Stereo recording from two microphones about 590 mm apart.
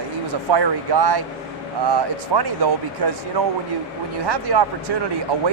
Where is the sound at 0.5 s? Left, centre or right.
Right.